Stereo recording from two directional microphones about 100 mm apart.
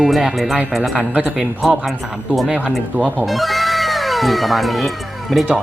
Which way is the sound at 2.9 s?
15° right (ahead or behind).